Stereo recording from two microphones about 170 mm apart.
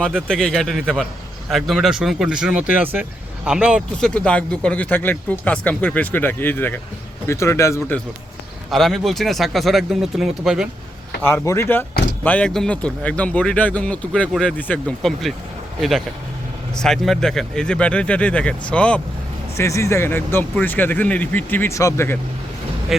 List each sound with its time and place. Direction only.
0.0 s speech: 5° left (ahead or behind)
8.7 s speech: centre (ahead or behind)
11.2 s speech: 15° left (ahead or behind)
19.5 s speech: 15° left (ahead or behind)
22.9 s speech: centre (ahead or behind)